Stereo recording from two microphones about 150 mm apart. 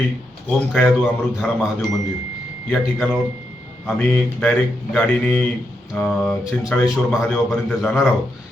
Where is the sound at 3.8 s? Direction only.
5° left (ahead or behind).